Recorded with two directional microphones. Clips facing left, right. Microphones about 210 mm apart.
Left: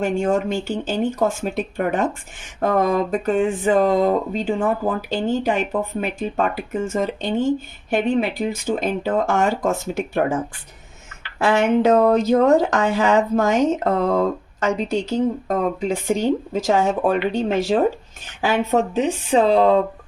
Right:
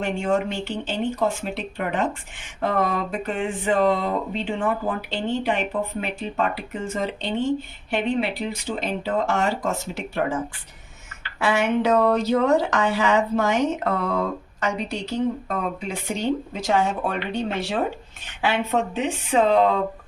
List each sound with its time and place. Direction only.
0.0 s speech: 45° left (ahead or behind)
6.9 s speech: 45° left (ahead or behind)
11.3 s speech: 45° left (ahead or behind)